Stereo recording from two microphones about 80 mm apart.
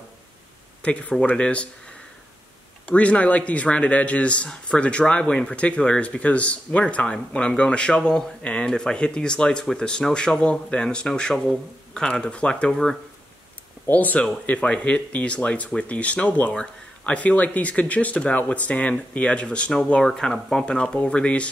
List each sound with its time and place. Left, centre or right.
0.8 s speech: centre
13.8 s speech: left